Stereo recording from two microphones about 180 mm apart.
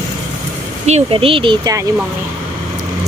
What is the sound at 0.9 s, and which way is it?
Speech, 35° right (ahead or behind).